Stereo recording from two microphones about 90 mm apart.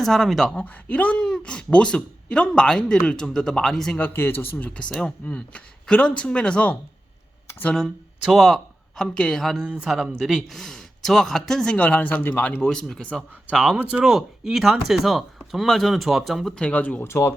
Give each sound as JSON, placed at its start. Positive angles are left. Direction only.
{"t": 0.0, "sound": "speech", "side_deg": 0}
{"t": 0.5, "sound": "speech", "side_deg": 15}
{"t": 3.9, "sound": "speech", "side_deg": 20}
{"t": 8.2, "sound": "speech", "side_deg": 0}
{"t": 9.6, "sound": "speech", "side_deg": -10}
{"t": 12.6, "sound": "speech", "side_deg": 5}
{"t": 13.5, "sound": "speech", "side_deg": -10}
{"t": 16.6, "sound": "speech", "side_deg": 15}
{"t": 17.1, "sound": "speech", "side_deg": 30}